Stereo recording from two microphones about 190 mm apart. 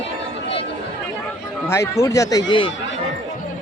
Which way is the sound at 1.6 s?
15° left (ahead or behind).